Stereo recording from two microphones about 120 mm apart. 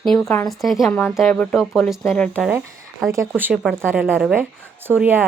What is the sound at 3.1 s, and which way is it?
Speech, 20° right (ahead or behind).